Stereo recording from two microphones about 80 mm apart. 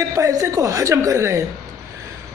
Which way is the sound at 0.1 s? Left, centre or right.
Right.